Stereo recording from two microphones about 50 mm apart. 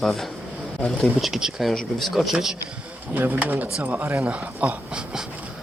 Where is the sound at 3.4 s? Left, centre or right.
Right.